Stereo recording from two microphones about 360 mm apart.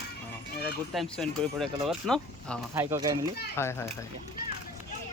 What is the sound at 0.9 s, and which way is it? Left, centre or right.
Speech, centre.